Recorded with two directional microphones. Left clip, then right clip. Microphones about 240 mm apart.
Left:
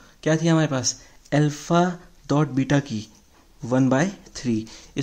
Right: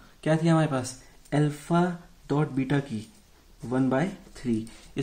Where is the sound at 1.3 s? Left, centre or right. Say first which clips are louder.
Left 5 dB; left.